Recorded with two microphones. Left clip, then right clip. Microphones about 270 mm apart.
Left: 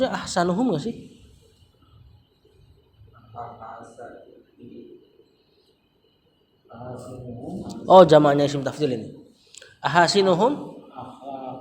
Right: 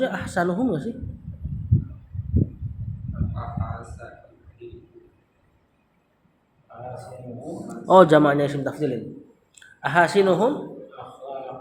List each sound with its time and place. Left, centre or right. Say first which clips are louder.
0.0 s a man's voice: left 1 dB; left
7.7 s a man's voice: left 2 dB; centre